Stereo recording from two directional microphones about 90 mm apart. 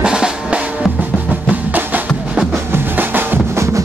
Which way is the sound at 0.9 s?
20° right (ahead or behind).